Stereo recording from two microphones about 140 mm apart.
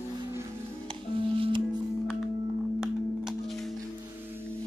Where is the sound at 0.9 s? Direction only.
40° right (ahead or behind).